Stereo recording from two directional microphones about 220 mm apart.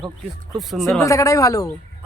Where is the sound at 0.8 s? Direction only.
15° left (ahead or behind).